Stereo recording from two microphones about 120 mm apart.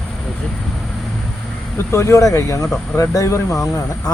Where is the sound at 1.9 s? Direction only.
25° left (ahead or behind).